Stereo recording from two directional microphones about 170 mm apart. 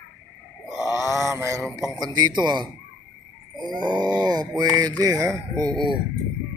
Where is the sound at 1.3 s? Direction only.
15° right (ahead or behind).